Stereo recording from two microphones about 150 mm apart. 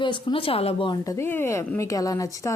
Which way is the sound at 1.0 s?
15° left (ahead or behind).